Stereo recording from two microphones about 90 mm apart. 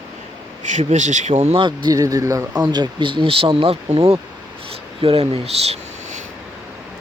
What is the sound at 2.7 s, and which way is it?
Speech, 60° right (ahead or behind).